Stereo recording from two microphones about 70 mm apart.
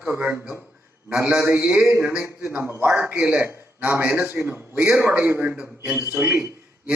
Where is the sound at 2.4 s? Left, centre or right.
Right.